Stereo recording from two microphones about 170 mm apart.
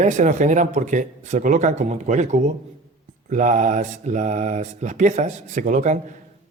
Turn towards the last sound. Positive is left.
turn(degrees=-45)  # may be behind; listen again after turning